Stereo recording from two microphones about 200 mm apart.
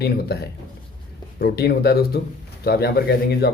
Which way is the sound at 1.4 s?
55° left (ahead or behind).